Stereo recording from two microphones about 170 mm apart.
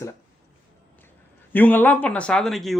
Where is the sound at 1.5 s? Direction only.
10° left (ahead or behind).